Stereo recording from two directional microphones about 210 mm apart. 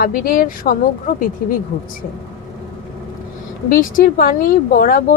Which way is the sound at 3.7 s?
40° left (ahead or behind).